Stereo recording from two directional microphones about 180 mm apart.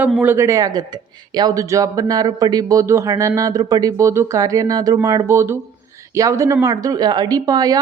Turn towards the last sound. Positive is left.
turn(degrees=-20)  # may be behind; listen again after turning